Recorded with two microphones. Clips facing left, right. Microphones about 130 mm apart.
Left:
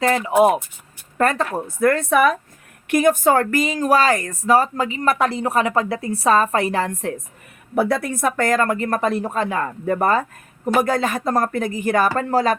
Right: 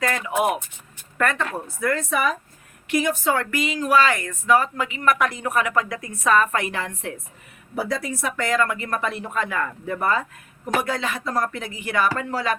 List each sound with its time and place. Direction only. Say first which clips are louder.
0.0 s speech: left 7 dB; 30° left (ahead or behind)
1.6 s speech: left 9 dB; 55° left (ahead or behind); by 7.1 s 40° left (ahead or behind)
7.8 s speech: left 7 dB; 60° left (ahead or behind); by 9.7 s 30° left (ahead or behind)
9.8 s speech: left 7 dB; 45° left (ahead or behind)